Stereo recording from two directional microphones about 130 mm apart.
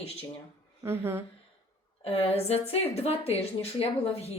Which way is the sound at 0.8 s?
15° right (ahead or behind).